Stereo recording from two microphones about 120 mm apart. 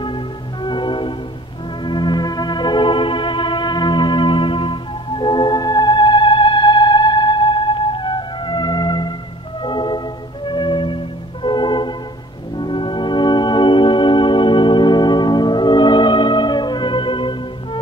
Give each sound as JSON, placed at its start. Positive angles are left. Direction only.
{"t": 0.7, "sound": "music", "side_deg": 40}
{"t": 1.9, "sound": "organ", "side_deg": 40}
{"t": 9.6, "sound": "music", "side_deg": 40}